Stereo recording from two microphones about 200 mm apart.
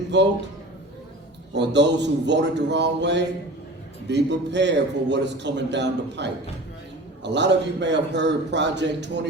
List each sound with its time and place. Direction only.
0.1 s a man's voice: 60° right (ahead or behind)
1.5 s a man's voice: 60° right (ahead or behind)